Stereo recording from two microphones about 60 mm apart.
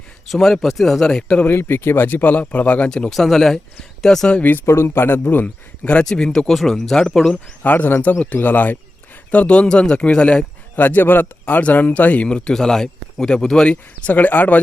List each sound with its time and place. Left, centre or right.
0.3 s speech: centre
1.5 s speech: left
2.9 s a man's voice: centre
4.4 s speech: left
4.6 s speech: left
6.1 s a man's voice: centre
7.6 s a man's voice: left; by 10.4 s centre
10.8 s speech: left; by 14.1 s centre
14.1 s speech: left